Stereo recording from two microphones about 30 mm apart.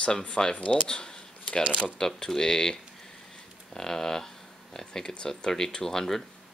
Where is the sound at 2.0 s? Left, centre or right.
Centre.